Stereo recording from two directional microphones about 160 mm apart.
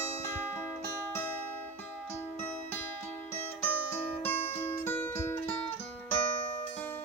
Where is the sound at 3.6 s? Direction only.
10° left (ahead or behind).